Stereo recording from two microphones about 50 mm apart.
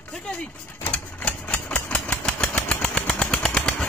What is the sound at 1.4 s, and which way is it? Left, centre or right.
Typewriter, left.